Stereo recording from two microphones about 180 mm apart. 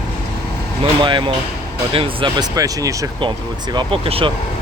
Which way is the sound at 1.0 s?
25° right (ahead or behind).